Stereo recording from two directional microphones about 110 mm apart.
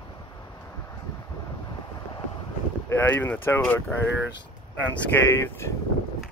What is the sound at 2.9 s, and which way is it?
Speech, 20° left (ahead or behind).